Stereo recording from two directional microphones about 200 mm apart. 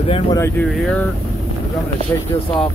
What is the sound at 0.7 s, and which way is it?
Speech, centre (ahead or behind).